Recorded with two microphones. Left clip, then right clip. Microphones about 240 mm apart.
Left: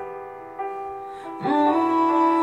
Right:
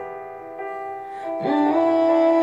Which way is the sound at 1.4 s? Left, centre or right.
Centre.